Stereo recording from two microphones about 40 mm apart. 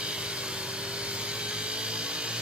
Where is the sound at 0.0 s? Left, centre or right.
Right.